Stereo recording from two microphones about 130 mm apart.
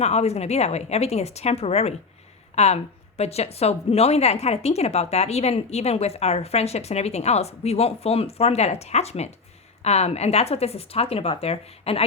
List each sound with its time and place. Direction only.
0.0 s speech: 55° left (ahead or behind)